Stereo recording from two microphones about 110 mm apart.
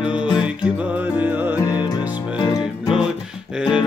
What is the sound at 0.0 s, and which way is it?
Music, 10° right (ahead or behind).